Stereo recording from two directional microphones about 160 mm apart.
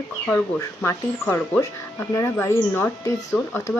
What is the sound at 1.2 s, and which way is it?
A woman's voice, 10° left (ahead or behind).